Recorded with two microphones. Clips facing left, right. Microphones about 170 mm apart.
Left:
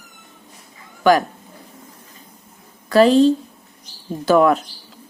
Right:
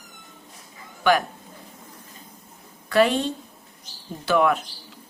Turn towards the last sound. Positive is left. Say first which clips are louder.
# left 6 dB
turn(degrees=40)  # may be behind; listen again after turning